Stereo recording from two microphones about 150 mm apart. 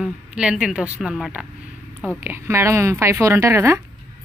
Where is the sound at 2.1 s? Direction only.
15° right (ahead or behind).